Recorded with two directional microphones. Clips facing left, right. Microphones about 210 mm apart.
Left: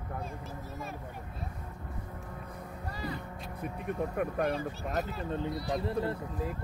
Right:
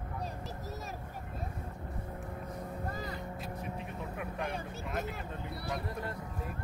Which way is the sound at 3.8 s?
55° left (ahead or behind).